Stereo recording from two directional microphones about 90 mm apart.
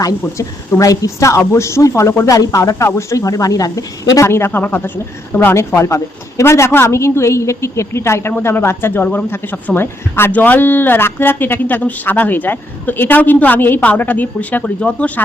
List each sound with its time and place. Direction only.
0.8 s speech: 35° left (ahead or behind); by 15.2 s 15° left (ahead or behind)